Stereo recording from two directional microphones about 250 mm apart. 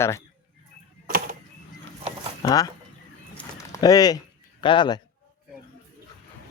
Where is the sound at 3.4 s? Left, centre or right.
Centre.